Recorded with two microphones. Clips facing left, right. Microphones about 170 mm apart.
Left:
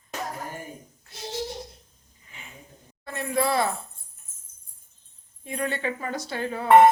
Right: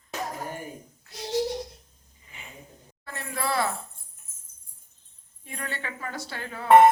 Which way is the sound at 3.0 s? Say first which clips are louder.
Left 6 dB; 20° left (ahead or behind).